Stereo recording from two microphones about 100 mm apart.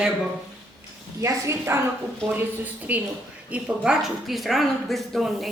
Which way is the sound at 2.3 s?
15° right (ahead or behind).